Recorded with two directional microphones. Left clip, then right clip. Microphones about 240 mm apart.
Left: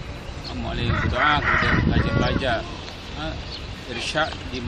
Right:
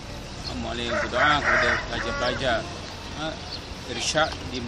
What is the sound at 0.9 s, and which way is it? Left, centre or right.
Speech, right.